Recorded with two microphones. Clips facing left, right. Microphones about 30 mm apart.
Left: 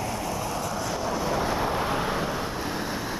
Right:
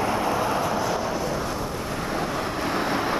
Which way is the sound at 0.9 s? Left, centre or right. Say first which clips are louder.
Right 3 dB; centre.